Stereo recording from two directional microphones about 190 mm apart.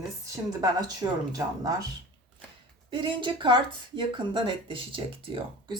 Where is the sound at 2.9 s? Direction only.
25° right (ahead or behind).